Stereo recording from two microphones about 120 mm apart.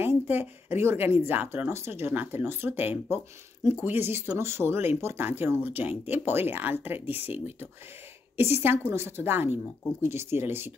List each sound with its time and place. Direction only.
0.0 s speech: 20° right (ahead or behind)